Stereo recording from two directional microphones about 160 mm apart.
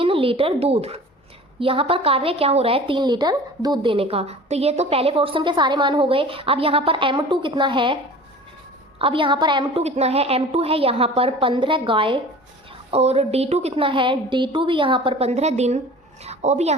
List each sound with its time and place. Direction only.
0.0 s a woman's voice: 35° right (ahead or behind)
9.0 s a woman's voice: 35° right (ahead or behind)
9.8 s a woman's voice: 40° right (ahead or behind)